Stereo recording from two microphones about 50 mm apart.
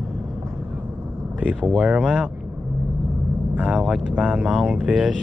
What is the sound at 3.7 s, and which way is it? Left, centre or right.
Speech, centre.